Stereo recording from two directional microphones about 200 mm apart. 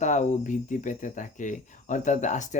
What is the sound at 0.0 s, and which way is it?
Speech, 35° left (ahead or behind).